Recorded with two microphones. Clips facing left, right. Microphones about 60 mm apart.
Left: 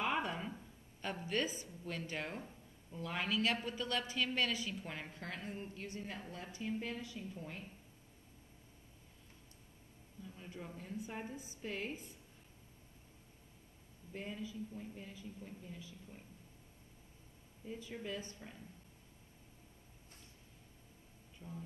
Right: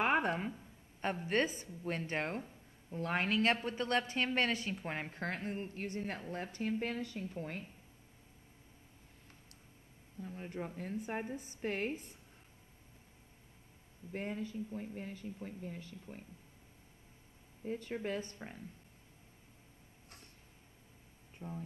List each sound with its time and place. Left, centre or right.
0.0 s a sound: right
1.2 s a woman's voice: right
10.2 s speech: right
14.1 s speech: right
17.6 s speech: right
21.4 s speech: right